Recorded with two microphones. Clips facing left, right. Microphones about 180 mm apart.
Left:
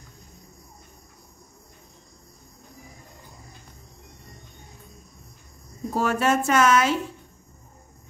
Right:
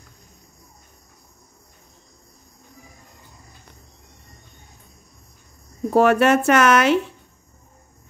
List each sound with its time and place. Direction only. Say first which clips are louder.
5.9 s a woman's voice: right 7 dB; 65° right (ahead or behind)